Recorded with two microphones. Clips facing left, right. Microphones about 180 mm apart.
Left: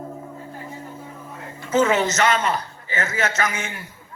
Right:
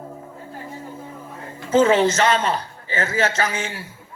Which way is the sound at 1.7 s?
30° right (ahead or behind).